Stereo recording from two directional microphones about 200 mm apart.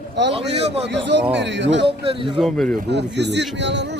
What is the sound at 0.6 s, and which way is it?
Speech, 30° right (ahead or behind).